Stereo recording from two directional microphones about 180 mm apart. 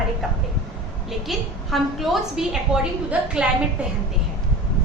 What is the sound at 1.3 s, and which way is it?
A woman's voice, centre (ahead or behind).